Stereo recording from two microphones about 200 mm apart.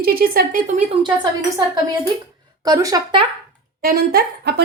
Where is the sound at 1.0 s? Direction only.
20° right (ahead or behind).